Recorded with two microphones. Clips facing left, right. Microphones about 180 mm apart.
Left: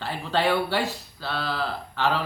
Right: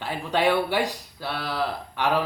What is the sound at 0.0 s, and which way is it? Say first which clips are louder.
Speech: right 2 dB; 15° right (ahead or behind).